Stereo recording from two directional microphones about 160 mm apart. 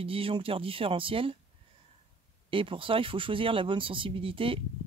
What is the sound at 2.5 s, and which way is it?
Speech, 35° right (ahead or behind).